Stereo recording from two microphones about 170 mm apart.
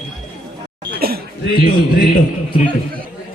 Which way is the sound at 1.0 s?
65° right (ahead or behind).